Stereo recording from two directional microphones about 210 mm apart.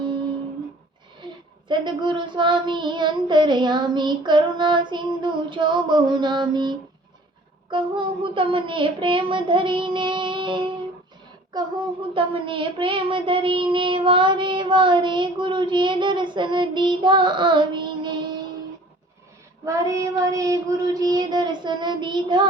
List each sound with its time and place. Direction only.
1.2 s a sound: 20° right (ahead or behind)
1.6 s child singing: 20° right (ahead or behind)
12.1 s child singing: 25° right (ahead or behind)
19.6 s child singing: 15° right (ahead or behind)